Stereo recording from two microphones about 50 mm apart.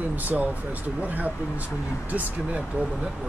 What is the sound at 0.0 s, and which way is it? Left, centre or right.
Speech, right.